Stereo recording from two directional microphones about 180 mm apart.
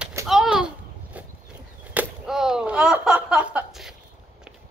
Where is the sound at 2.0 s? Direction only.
5° right (ahead or behind).